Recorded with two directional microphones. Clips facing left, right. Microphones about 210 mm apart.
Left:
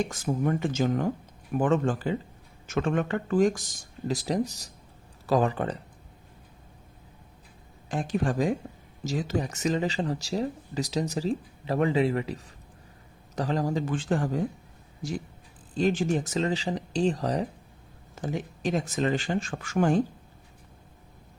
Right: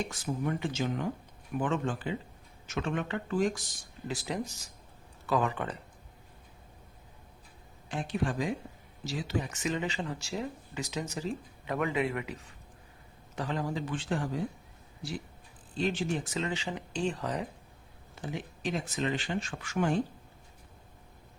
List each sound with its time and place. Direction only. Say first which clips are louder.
0.1 s speech: left 6 dB; 45° left (ahead or behind)
7.9 s speech: left 5 dB; 45° left (ahead or behind)
15.7 s speech: left 6 dB; 45° left (ahead or behind)